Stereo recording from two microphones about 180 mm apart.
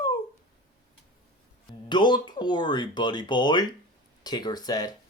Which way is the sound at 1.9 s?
25° left (ahead or behind).